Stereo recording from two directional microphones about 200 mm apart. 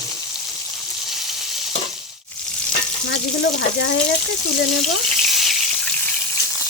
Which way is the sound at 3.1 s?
55° left (ahead or behind).